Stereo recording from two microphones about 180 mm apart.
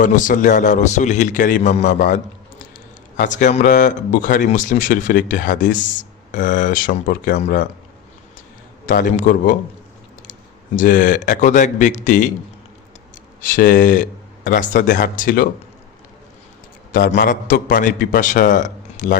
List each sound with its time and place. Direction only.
0.0 s speech: 45° left (ahead or behind)
8.9 s speech: 50° left (ahead or behind)
10.8 s speech: 50° left (ahead or behind)
13.4 s speech: 50° left (ahead or behind)
16.9 s speech: 50° left (ahead or behind)